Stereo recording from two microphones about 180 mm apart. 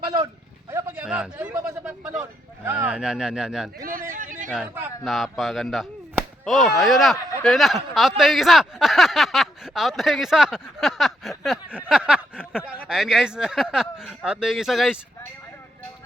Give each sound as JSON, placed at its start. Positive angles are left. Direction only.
{"t": 0.0, "sound": "speech", "side_deg": -25}
{"t": 3.8, "sound": "speech", "side_deg": -50}
{"t": 4.5, "sound": "speech", "side_deg": -10}